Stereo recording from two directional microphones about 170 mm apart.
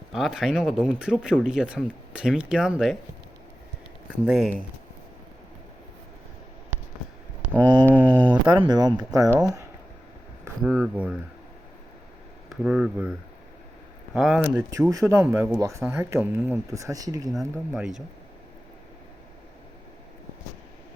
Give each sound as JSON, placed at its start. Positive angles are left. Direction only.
{"t": 0.1, "sound": "speech", "side_deg": 0}
{"t": 4.1, "sound": "speech", "side_deg": -5}
{"t": 7.5, "sound": "a sound", "side_deg": -10}
{"t": 8.4, "sound": "speech", "side_deg": -25}
{"t": 10.6, "sound": "speech", "side_deg": 0}
{"t": 12.5, "sound": "speech", "side_deg": -5}
{"t": 14.7, "sound": "speech", "side_deg": -20}
{"t": 17.7, "sound": "speech", "side_deg": 0}